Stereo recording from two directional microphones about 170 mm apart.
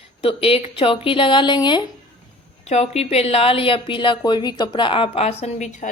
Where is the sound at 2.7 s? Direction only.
40° left (ahead or behind).